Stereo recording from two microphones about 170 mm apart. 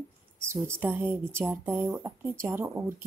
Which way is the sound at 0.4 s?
15° right (ahead or behind).